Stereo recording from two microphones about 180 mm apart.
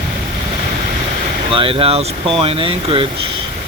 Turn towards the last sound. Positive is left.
turn(degrees=-30)  # may be behind; listen again after turning